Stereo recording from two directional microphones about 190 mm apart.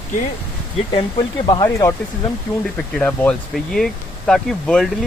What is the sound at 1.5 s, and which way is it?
Speech, 20° left (ahead or behind).